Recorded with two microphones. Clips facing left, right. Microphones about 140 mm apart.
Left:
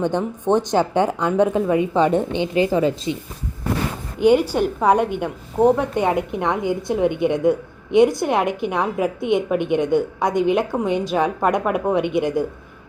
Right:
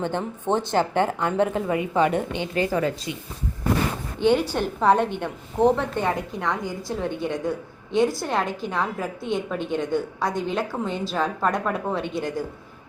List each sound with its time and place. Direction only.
0.0 s a woman's voice: 15° left (ahead or behind)
4.2 s a woman's voice: 10° left (ahead or behind)